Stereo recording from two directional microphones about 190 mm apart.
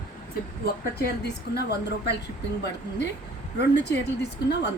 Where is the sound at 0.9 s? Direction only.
55° left (ahead or behind).